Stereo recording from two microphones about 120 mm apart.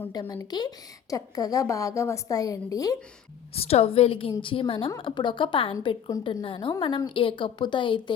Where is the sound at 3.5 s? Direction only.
55° left (ahead or behind).